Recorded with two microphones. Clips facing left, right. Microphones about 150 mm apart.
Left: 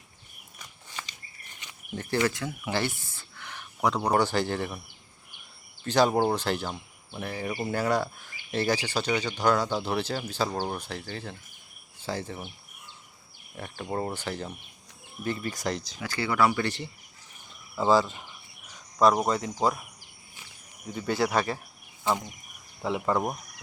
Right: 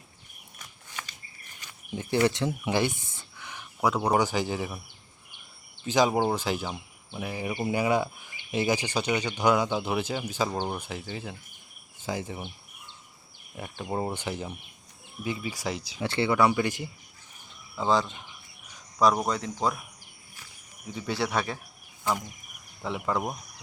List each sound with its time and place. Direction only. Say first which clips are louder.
2.0 s speech: right 2 dB; 15° right (ahead or behind)
2.3 s speech: right 4 dB; 25° right (ahead or behind); by 4.8 s 5° right (ahead or behind)
5.8 s speech: left 1 dB; 10° right (ahead or behind)
13.6 s speech: even; 15° right (ahead or behind)
16.0 s speech: right 3 dB; 25° right (ahead or behind)
17.7 s speech: left 3 dB; 5° left (ahead or behind)
20.9 s speech: left 3 dB; centre (ahead or behind)
22.8 s speech: left 3 dB; centre (ahead or behind)